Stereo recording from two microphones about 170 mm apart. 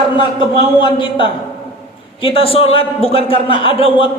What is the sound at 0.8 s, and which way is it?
A man's voice, 30° left (ahead or behind).